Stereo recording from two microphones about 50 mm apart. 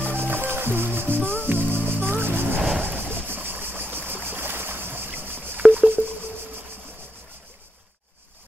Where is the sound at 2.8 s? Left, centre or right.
Right.